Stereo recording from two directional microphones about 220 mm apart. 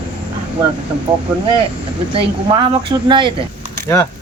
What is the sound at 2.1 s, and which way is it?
Speech, 25° right (ahead or behind).